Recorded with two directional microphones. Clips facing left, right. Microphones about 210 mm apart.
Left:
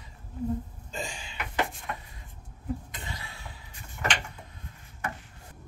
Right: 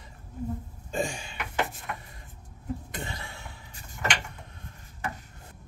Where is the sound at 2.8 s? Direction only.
50° right (ahead or behind).